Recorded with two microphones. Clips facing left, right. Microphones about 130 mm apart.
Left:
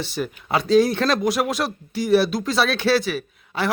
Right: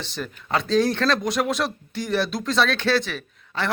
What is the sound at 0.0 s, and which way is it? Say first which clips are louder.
A man's voice: left 5 dB; 10° left (ahead or behind).